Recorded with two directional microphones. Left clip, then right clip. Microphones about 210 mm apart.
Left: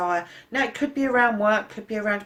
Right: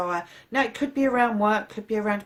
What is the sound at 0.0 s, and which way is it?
Speech, 40° right (ahead or behind).